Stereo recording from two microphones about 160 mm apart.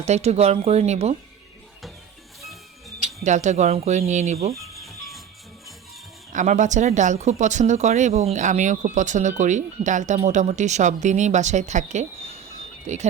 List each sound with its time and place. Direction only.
0.0 s speech: 45° right (ahead or behind)
3.2 s speech: 50° right (ahead or behind)
4.8 s music: centre (ahead or behind)
6.3 s speech: 50° right (ahead or behind)